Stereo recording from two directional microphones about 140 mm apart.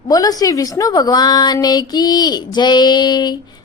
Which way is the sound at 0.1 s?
25° left (ahead or behind).